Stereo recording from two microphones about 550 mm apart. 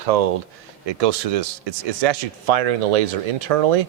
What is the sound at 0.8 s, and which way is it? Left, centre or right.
A man's voice, right.